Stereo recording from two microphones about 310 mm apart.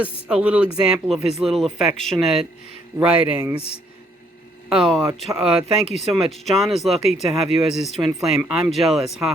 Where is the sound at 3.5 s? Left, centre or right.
Centre.